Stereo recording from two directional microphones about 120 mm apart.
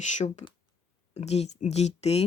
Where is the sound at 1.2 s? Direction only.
65° left (ahead or behind).